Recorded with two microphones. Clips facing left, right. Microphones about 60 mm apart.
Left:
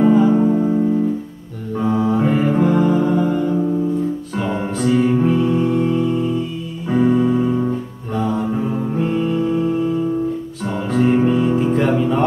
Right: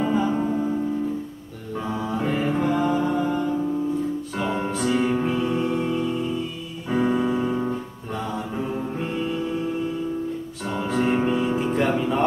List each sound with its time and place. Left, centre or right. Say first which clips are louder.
0.1 s music: left 9 dB; centre
1.8 s music: left 9 dB; centre